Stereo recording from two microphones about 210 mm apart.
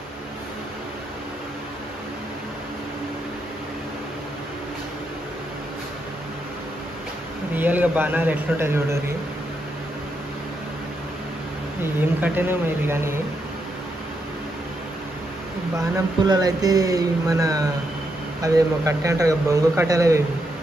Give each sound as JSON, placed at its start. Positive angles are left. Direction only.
{"t": 7.5, "sound": "a man's voice", "side_deg": -10}
{"t": 11.8, "sound": "a man's voice", "side_deg": -10}
{"t": 16.3, "sound": "a man's voice", "side_deg": -15}